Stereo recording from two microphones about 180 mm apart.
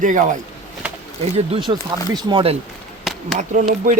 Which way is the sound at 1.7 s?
25° right (ahead or behind).